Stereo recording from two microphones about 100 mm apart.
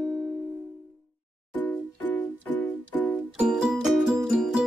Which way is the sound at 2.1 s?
15° left (ahead or behind).